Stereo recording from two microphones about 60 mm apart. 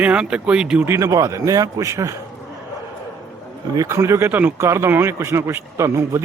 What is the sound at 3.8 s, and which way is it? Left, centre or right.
Speech, right.